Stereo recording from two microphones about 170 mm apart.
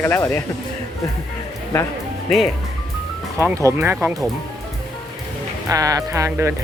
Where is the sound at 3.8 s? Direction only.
10° right (ahead or behind).